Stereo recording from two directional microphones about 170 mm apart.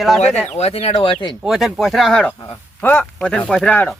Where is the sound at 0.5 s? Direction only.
40° left (ahead or behind).